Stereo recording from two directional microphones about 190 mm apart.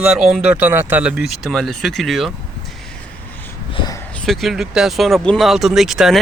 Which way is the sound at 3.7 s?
20° left (ahead or behind).